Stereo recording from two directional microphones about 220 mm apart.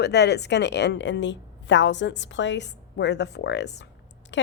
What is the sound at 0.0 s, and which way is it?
A woman's voice, 50° left (ahead or behind).